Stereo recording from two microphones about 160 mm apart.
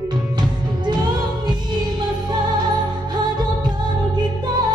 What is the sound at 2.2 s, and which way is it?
Music, 25° right (ahead or behind).